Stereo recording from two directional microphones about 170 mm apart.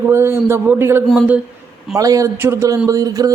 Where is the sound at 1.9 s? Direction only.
20° right (ahead or behind).